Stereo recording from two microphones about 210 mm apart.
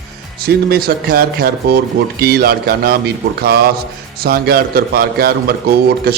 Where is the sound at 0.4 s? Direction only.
45° right (ahead or behind).